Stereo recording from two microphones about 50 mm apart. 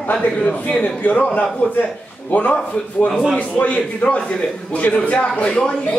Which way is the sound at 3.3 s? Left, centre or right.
Left.